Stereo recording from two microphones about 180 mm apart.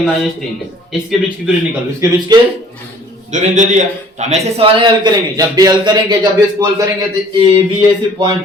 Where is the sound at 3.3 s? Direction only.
45° right (ahead or behind); by 6.7 s 20° right (ahead or behind).